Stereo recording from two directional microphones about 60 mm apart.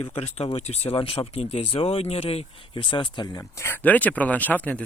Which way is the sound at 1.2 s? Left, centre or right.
Left.